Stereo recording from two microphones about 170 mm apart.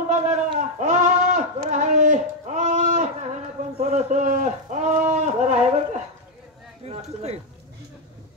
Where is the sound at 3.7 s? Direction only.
40° right (ahead or behind).